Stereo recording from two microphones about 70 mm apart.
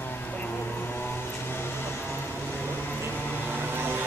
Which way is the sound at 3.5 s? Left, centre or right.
Right.